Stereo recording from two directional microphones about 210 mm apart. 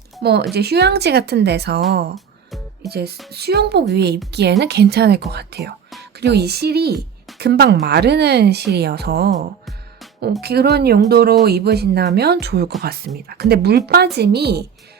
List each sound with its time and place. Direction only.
0.2 s speech: 50° right (ahead or behind)
2.1 s music: centre (ahead or behind)
2.9 s speech: 50° right (ahead or behind)
10.4 s speech: 50° right (ahead or behind)